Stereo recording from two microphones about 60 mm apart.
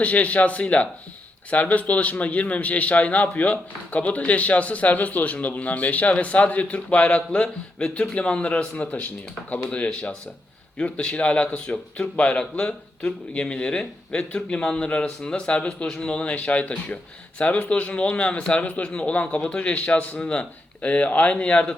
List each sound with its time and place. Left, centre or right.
0.0 s a man's voice: left